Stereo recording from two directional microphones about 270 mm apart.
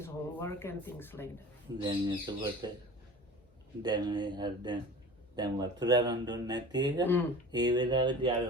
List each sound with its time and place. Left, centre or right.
0.0 s speech: centre
1.8 s speech: centre
3.8 s speech: centre